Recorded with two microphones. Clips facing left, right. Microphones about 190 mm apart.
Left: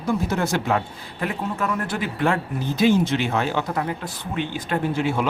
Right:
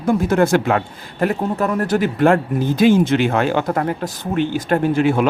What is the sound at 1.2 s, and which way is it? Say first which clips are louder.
Speech: right 7 dB; 45° right (ahead or behind).